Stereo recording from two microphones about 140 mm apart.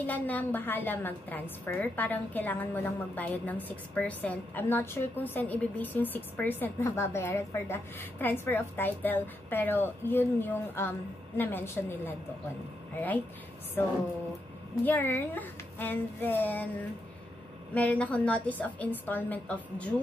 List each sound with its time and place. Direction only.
0.0 s a woman's voice: 10° left (ahead or behind)
13.8 s a woman's voice: 15° left (ahead or behind)